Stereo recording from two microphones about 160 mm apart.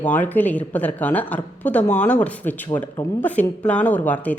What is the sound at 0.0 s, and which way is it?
Speech, 10° left (ahead or behind).